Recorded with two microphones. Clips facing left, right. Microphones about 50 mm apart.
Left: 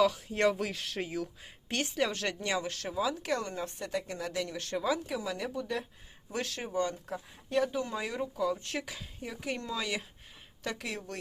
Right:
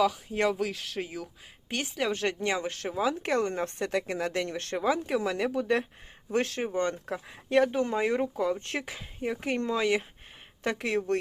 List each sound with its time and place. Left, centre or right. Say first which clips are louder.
0.0 s a woman's voice: right 1 dB; centre
2.1 s speech: right 4 dB; right
5.1 s speech: right 7 dB; right
6.3 s speech: right 8 dB; right
6.7 s speech: right 1 dB; right